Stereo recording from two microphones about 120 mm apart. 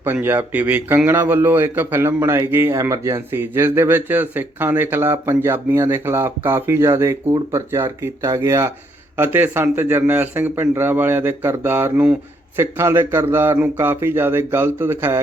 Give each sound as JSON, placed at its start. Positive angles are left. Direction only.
{"t": 0.0, "sound": "a man's voice", "side_deg": -20}